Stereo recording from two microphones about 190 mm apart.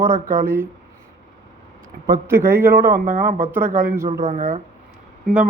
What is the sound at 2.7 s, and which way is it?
Speech, 50° right (ahead or behind).